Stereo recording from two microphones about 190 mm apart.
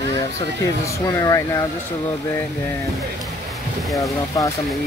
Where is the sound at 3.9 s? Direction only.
15° left (ahead or behind).